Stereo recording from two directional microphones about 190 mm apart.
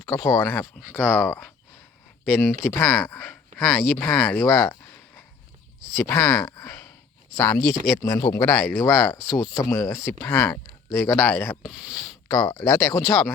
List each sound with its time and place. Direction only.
0.1 s speech: 15° left (ahead or behind)
5.9 s speech: 10° left (ahead or behind)
11.6 s speech: 5° right (ahead or behind)
12.3 s speech: 20° left (ahead or behind)